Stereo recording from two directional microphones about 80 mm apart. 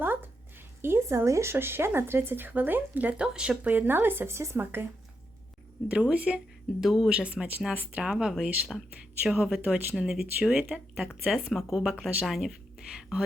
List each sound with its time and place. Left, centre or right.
0.0 s a sound: right
0.8 s speech: right
5.9 s speech: centre